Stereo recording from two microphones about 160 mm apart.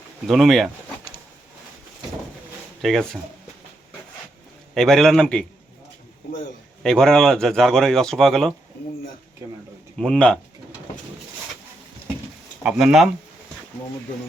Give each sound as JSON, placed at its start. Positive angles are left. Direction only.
{"t": 0.3, "sound": "speech", "side_deg": 0}
{"t": 2.8, "sound": "speech", "side_deg": 5}
{"t": 4.7, "sound": "speech", "side_deg": 0}
{"t": 6.8, "sound": "speech", "side_deg": 5}
{"t": 9.4, "sound": "speech", "side_deg": -20}
{"t": 10.0, "sound": "speech", "side_deg": 5}
{"t": 12.6, "sound": "speech", "side_deg": -5}